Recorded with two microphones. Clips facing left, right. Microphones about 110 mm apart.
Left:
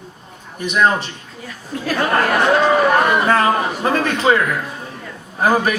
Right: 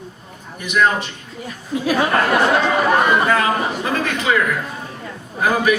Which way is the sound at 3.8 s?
35° left (ahead or behind).